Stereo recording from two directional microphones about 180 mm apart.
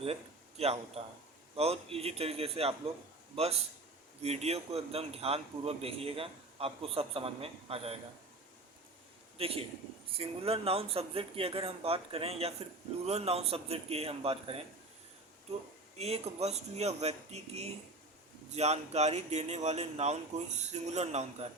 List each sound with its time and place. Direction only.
0.0 s a man's voice: 35° right (ahead or behind)
9.4 s a man's voice: 30° right (ahead or behind)
16.0 s a man's voice: 35° right (ahead or behind)